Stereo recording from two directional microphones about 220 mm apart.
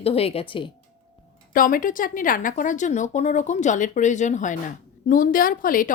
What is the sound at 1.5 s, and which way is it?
A woman's voice, 40° left (ahead or behind).